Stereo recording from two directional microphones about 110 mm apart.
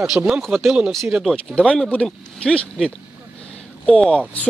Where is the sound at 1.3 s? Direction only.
10° left (ahead or behind).